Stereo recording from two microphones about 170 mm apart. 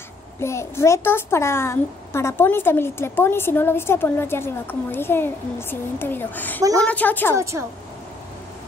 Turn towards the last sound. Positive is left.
turn(degrees=-15)  # may be behind; listen again after turning